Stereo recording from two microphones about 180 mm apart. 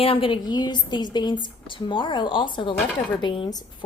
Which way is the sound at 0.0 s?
30° left (ahead or behind).